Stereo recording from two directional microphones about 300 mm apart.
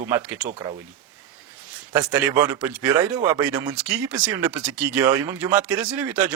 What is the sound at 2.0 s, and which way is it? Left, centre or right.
Speech, centre.